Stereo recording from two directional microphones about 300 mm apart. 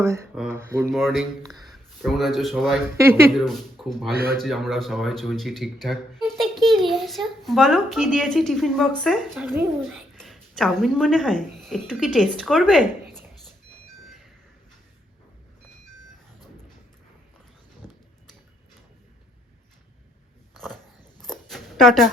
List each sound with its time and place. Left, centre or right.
0.0 s speech: centre
4.1 s speech: right
4.4 s speech: centre
17.8 s a sound: centre
20.5 s dog: centre
21.2 s a sound: centre